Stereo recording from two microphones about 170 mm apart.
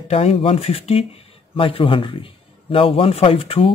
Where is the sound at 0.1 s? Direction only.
35° left (ahead or behind).